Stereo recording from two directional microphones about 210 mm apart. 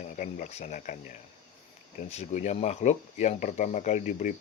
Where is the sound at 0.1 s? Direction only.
35° left (ahead or behind).